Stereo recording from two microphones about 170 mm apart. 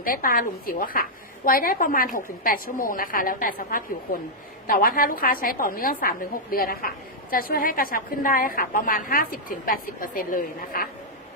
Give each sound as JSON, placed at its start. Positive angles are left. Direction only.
{"t": 0.0, "sound": "a woman's voice", "side_deg": 55}